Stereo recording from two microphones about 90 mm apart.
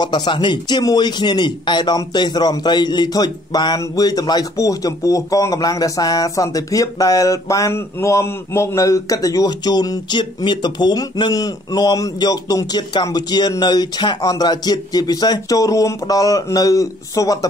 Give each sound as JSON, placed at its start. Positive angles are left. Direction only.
{"t": 0.0, "sound": "a man's voice", "side_deg": 55}